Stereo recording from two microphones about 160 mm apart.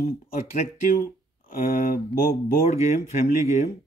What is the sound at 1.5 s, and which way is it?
Speech, 60° left (ahead or behind).